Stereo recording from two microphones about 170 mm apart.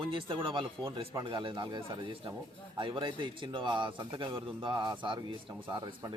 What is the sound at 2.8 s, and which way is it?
Speech, 30° right (ahead or behind).